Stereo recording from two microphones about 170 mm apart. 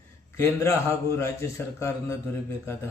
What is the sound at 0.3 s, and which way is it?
A man's voice, 15° left (ahead or behind).